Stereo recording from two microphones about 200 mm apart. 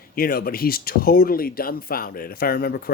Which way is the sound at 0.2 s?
50° left (ahead or behind).